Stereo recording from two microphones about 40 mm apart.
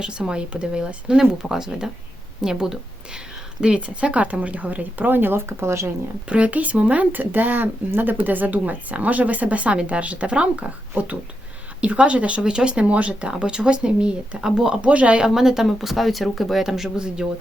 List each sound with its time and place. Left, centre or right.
0.0 s a woman's voice: right
3.6 s speech: right
6.2 s speech: right
7.1 s speech: right
12.8 s speech: right
13.3 s speech: right
14.8 s speech: right
15.2 s speech: centre